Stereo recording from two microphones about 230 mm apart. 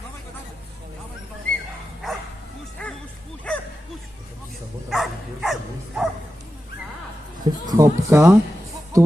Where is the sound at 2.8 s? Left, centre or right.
Centre.